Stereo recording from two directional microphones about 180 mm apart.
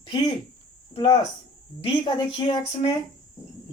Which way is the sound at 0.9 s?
25° left (ahead or behind).